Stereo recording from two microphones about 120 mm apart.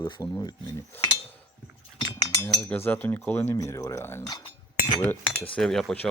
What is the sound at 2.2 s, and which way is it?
Cutlery, 30° left (ahead or behind).